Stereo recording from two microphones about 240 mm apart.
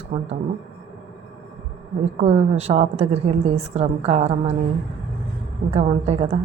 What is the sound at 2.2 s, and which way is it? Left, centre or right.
A woman's voice, right.